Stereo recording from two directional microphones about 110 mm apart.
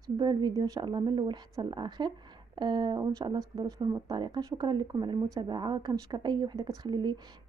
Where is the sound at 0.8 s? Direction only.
45° right (ahead or behind).